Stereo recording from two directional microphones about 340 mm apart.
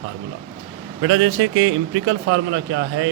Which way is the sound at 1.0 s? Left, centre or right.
Right.